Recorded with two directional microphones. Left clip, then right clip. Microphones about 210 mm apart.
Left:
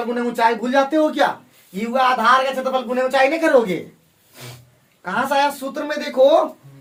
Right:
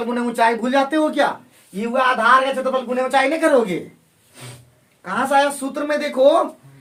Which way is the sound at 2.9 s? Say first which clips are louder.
Left 2 dB; 15° right (ahead or behind).